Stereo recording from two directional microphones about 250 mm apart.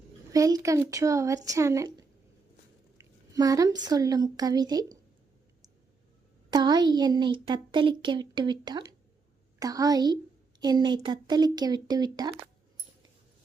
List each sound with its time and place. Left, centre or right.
0.3 s a child's voice: centre
6.5 s a child's voice: centre